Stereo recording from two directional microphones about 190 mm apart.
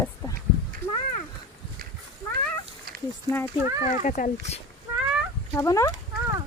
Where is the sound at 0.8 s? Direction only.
10° left (ahead or behind).